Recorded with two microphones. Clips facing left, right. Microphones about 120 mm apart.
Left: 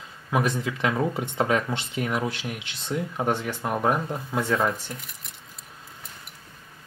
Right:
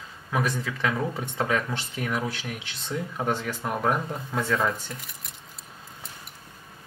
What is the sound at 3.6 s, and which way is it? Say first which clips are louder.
Speech: left 2 dB; 10° left (ahead or behind).